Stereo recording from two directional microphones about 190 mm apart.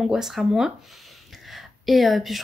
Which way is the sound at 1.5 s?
Centre (ahead or behind).